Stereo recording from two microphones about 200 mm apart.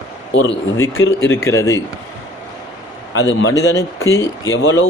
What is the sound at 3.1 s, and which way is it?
Speech, 65° left (ahead or behind).